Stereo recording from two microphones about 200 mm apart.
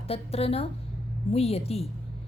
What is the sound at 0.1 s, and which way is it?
A woman's voice, 30° left (ahead or behind).